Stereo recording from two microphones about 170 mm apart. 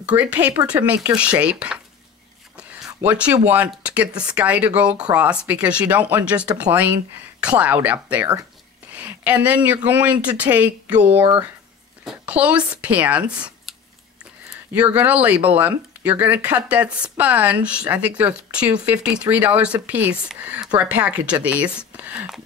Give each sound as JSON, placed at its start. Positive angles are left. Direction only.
{"t": 0.0, "sound": "speech", "side_deg": -10}
{"t": 2.5, "sound": "a sound", "side_deg": -5}
{"t": 3.4, "sound": "speech", "side_deg": -10}
{"t": 6.4, "sound": "speech", "side_deg": -25}
{"t": 7.3, "sound": "speech", "side_deg": -5}
{"t": 14.7, "sound": "speech", "side_deg": -10}